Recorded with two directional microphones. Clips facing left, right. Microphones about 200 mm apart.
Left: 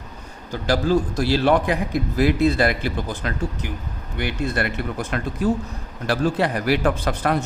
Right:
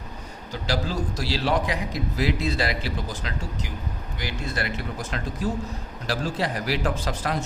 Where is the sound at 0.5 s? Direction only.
50° left (ahead or behind).